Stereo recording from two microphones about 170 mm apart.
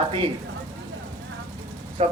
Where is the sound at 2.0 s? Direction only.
35° right (ahead or behind).